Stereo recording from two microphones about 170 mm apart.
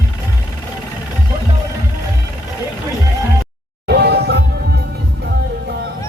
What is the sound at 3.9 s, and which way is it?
Music, 70° right (ahead or behind).